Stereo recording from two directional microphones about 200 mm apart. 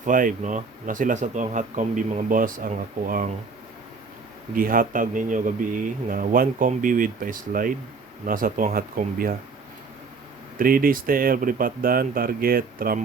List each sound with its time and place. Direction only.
0.0 s speech: 40° right (ahead or behind)
4.5 s speech: 45° right (ahead or behind)
10.6 s speech: 45° right (ahead or behind)